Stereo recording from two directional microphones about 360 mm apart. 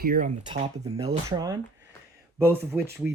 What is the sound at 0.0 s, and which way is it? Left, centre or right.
Speech, right.